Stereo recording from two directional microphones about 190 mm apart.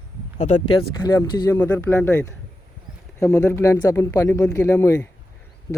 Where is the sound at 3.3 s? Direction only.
15° left (ahead or behind).